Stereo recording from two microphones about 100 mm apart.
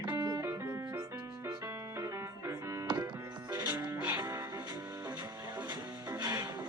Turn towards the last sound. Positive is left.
turn(degrees=-45)  # may be behind; listen again after turning